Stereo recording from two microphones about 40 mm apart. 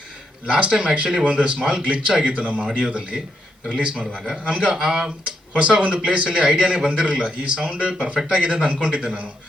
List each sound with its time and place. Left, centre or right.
0.4 s a man's voice: right
4.5 s speech: centre
5.5 s a man's voice: right